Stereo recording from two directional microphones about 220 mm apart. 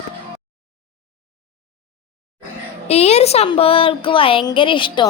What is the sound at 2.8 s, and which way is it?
A woman's voice, 30° left (ahead or behind).